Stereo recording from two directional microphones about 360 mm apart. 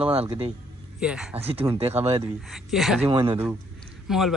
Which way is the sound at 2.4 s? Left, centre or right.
Centre.